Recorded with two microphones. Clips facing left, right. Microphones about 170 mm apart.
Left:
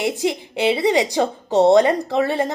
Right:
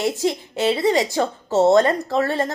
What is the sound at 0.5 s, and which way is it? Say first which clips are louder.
A woman's voice: left 2 dB; 15° left (ahead or behind).